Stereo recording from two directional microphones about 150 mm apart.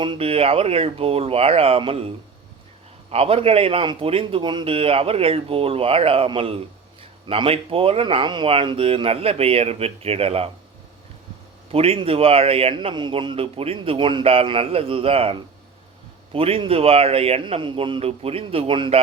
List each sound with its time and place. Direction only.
0.0 s a man's voice: 35° right (ahead or behind)
11.7 s a man's voice: 40° right (ahead or behind)